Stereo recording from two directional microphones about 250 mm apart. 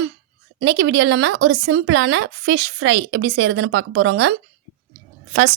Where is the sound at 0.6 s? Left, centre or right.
Right.